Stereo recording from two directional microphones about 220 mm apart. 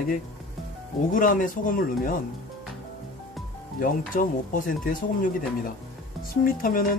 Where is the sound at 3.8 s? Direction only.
40° left (ahead or behind).